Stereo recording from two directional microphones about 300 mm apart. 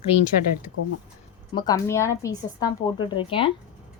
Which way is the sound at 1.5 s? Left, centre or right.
Centre.